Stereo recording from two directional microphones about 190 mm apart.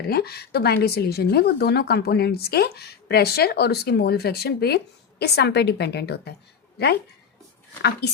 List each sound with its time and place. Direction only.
0.1 s speech: 55° left (ahead or behind)